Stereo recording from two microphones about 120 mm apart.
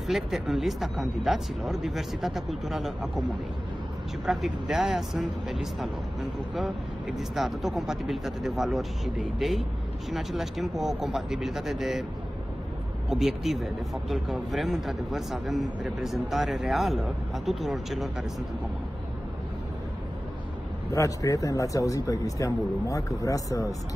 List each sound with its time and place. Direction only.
0.0 s speech: 5° right (ahead or behind)
4.3 s speech: centre (ahead or behind)
7.2 s speech: centre (ahead or behind)
13.1 s speech: centre (ahead or behind)
20.9 s speech: 25° left (ahead or behind)